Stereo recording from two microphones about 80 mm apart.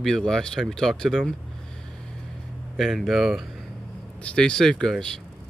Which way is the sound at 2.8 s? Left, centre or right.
Centre.